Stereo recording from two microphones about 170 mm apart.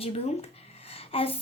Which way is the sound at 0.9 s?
35° left (ahead or behind).